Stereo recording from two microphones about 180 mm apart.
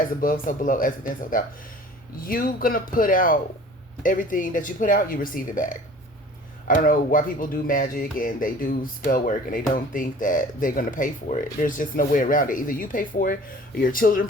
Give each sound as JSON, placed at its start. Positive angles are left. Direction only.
{"t": 0.2, "sound": "speech", "side_deg": 50}